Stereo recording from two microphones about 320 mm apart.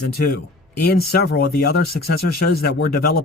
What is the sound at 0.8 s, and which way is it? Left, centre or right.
Speech, left.